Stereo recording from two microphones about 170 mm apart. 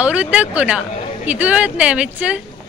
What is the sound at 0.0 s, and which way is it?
Speech, 10° right (ahead or behind).